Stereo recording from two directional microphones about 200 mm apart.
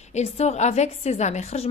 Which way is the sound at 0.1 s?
35° left (ahead or behind).